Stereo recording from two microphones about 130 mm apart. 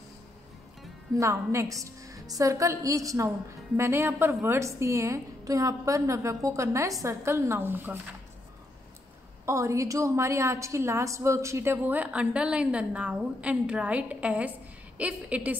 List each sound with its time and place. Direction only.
1.1 s a woman's voice: 20° right (ahead or behind)
9.5 s a woman's voice: 25° right (ahead or behind)